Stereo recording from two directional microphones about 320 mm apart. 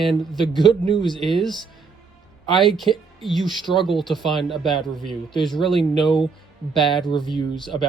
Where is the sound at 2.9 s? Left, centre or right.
Centre.